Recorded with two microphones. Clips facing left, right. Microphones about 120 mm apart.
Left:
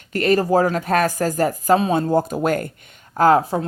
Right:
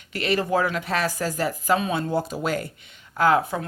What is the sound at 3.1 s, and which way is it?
Speech, 40° left (ahead or behind).